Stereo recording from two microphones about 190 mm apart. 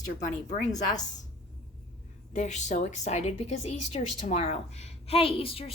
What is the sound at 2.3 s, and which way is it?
A woman's voice, 40° left (ahead or behind).